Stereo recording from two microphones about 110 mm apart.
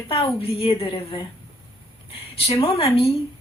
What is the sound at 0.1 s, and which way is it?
A woman's voice, 55° left (ahead or behind).